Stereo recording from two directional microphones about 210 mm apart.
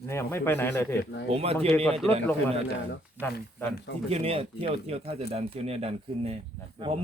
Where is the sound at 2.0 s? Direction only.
5° left (ahead or behind).